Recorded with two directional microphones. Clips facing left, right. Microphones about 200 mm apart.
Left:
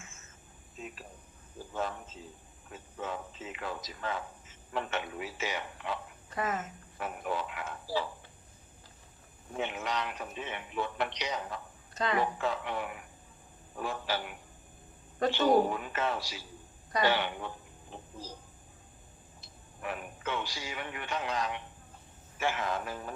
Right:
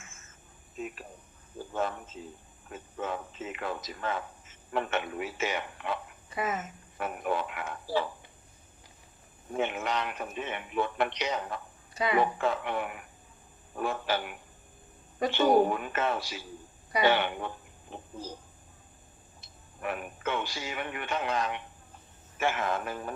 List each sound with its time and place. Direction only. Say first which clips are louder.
2.7 s a sound: right 3 dB; 55° right (ahead or behind)
6.3 s speech: right 1 dB; 10° right (ahead or behind)
7.0 s speech: right 4 dB; 55° right (ahead or behind)
9.6 s speech: right 4 dB; 55° right (ahead or behind)
12.0 s speech: right 3 dB; 10° right (ahead or behind)
12.4 s speech: right 3 dB; 55° right (ahead or behind)
19.8 s speech: right 4 dB; 55° right (ahead or behind)